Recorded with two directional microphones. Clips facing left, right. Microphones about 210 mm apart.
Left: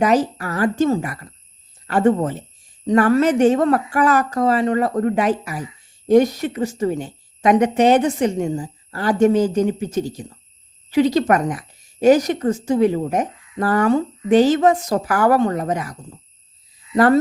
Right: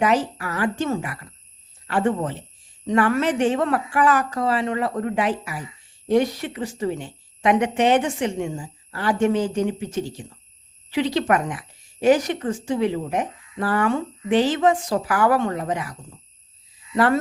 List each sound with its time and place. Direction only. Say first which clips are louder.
0.0 s a woman's voice: left 4 dB; 40° left (ahead or behind)